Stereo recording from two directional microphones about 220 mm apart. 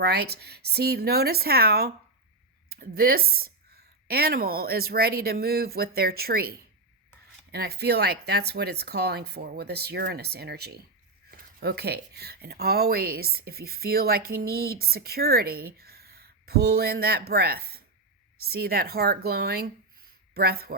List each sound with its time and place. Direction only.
0.0 s speech: 45° right (ahead or behind)